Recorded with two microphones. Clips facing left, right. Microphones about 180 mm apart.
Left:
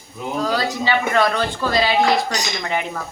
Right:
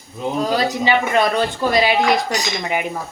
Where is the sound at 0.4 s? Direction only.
20° right (ahead or behind).